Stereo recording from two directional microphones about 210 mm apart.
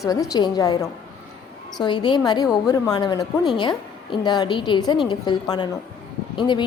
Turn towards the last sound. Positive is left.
turn(degrees=20)  # may be behind; listen again after turning